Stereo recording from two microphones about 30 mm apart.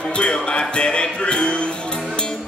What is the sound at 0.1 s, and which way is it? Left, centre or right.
Music, left.